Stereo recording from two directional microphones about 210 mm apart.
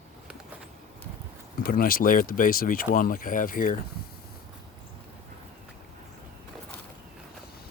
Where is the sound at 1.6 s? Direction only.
45° left (ahead or behind).